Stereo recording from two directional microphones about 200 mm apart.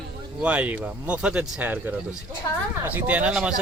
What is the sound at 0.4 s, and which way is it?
Speech, 5° right (ahead or behind).